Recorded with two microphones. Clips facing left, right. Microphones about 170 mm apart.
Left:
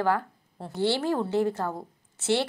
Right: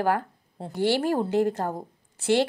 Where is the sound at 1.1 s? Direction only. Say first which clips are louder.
Right 2 dB; 15° right (ahead or behind).